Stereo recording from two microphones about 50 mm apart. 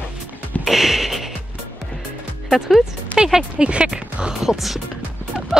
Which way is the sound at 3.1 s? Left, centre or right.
Centre.